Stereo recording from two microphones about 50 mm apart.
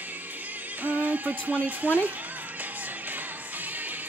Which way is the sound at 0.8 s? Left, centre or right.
Right.